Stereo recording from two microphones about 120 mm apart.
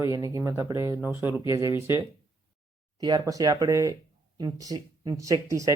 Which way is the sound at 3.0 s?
35° right (ahead or behind).